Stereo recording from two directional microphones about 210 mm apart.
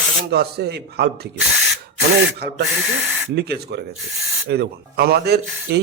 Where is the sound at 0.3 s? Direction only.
50° right (ahead or behind).